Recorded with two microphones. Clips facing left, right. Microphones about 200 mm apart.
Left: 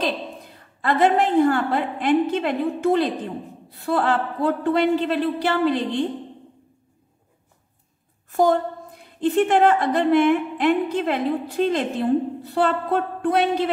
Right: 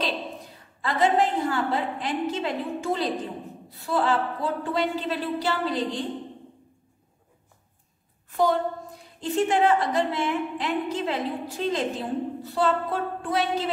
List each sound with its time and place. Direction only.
0.7 s a woman's voice: 60° left (ahead or behind)
8.3 s a woman's voice: 50° left (ahead or behind)